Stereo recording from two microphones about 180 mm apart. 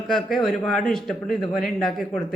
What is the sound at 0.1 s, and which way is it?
Speech, centre (ahead or behind).